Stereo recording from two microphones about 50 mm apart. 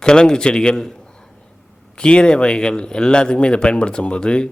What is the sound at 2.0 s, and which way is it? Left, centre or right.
A man's voice, centre.